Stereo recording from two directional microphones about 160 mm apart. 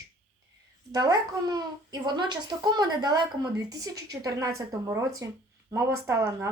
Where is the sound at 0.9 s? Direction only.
25° right (ahead or behind).